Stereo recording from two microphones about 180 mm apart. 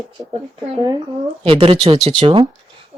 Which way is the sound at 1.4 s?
30° right (ahead or behind).